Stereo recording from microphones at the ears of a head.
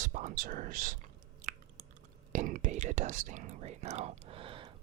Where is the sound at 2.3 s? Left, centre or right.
Right.